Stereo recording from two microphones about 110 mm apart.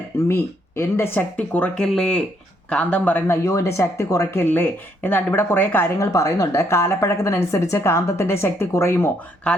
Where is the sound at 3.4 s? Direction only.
25° left (ahead or behind).